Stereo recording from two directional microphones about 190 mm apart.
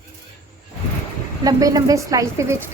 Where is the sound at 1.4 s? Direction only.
20° right (ahead or behind).